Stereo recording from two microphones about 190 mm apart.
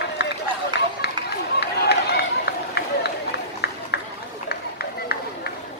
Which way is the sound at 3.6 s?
60° left (ahead or behind).